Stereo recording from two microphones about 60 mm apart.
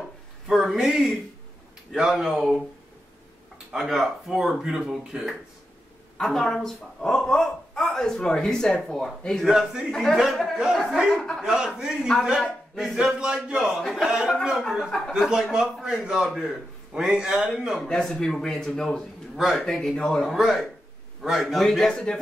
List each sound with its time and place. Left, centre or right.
0.5 s a man's voice: centre
3.7 s speech: centre
6.1 s a woman's voice: centre
9.5 s a man's voice: centre
11.4 s a man's voice: centre
13.6 s a man's voice: centre
14.9 s a woman's voice: centre
15.1 s a man's voice: centre
17.7 s a woman's voice: centre
19.3 s a woman's voice: centre
21.6 s a woman's voice: centre